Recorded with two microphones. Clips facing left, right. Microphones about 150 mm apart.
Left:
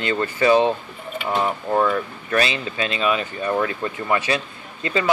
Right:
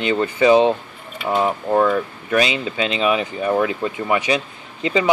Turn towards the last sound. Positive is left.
turn(degrees=-20)  # may be behind; listen again after turning